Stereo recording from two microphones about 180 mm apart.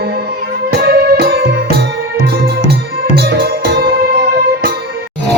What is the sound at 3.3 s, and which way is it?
Music, 55° right (ahead or behind).